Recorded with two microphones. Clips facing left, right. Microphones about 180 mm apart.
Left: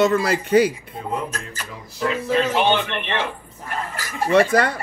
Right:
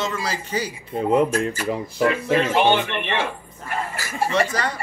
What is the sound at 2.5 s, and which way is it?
Speech, 10° right (ahead or behind).